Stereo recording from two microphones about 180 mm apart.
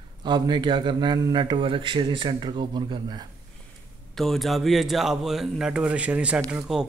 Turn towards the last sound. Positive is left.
turn(degrees=0)  # may be behind; listen again after turning